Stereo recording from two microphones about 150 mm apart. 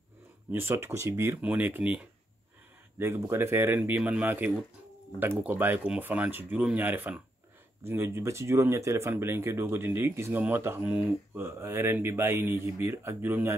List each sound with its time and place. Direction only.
0.5 s speech: 15° right (ahead or behind)
3.0 s speech: 15° right (ahead or behind)